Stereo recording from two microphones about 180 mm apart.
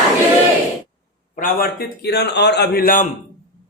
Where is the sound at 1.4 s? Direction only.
55° left (ahead or behind).